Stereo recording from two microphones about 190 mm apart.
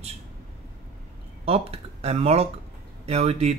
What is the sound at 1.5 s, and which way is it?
Speech, 30° right (ahead or behind).